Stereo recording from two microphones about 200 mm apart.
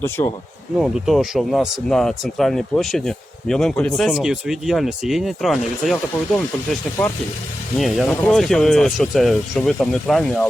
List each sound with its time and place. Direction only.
0.0 s speech: 10° left (ahead or behind)
0.8 s speech: centre (ahead or behind)
7.8 s speech: centre (ahead or behind)